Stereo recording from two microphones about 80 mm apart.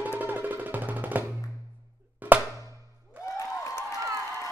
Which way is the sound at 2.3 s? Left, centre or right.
Right.